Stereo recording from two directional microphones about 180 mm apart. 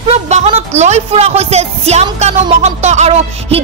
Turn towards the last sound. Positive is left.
turn(degrees=-35)  # may be behind; listen again after turning